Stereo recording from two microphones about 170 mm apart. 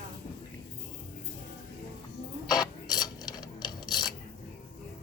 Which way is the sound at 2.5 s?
25° left (ahead or behind).